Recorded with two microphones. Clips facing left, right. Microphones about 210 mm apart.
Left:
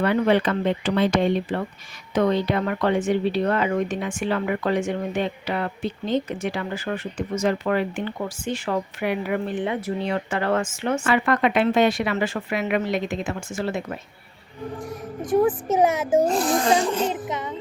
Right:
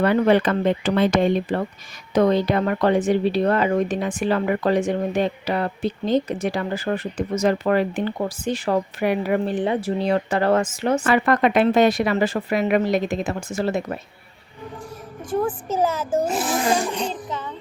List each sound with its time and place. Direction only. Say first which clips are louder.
0.0 s speech: right 3 dB; 45° right (ahead or behind)
15.2 s a woman's voice: left 4 dB; 15° left (ahead or behind)
16.2 s speech: left 1 dB; 5° right (ahead or behind)
17.1 s music: left 2 dB; 20° left (ahead or behind)